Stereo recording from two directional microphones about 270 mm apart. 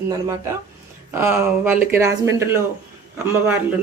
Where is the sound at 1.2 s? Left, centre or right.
Centre.